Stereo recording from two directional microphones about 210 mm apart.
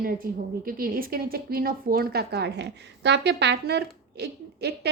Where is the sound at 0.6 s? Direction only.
45° right (ahead or behind).